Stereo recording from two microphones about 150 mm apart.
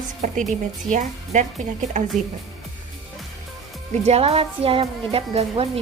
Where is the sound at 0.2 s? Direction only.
55° right (ahead or behind).